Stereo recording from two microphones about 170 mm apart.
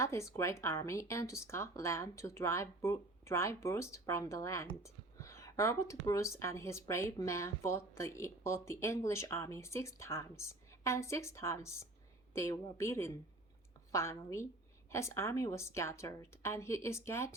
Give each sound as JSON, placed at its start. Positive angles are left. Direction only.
{"t": 0.0, "sound": "speech", "side_deg": 15}